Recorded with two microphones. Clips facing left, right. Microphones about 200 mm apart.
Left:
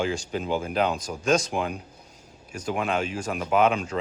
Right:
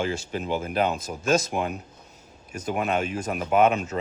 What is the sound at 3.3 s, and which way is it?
Speech, 5° right (ahead or behind).